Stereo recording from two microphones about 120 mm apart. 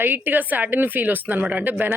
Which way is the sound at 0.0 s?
15° right (ahead or behind).